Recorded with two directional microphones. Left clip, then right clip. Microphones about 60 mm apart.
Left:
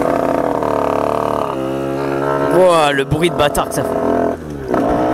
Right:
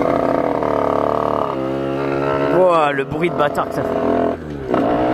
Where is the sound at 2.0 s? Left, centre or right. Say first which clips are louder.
Left 1 dB; left.